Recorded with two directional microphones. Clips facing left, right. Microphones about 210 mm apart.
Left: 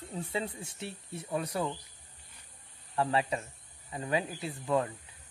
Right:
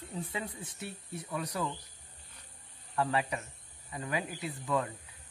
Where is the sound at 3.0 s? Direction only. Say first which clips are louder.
Left 2 dB; 25° left (ahead or behind).